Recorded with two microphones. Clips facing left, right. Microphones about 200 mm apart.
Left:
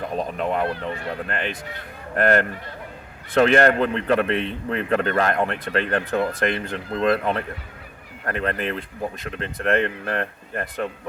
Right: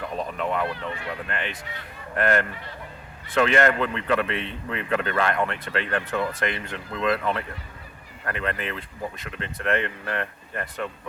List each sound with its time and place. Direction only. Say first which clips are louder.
0.0 s a man's voice: left 3 dB; 35° left (ahead or behind)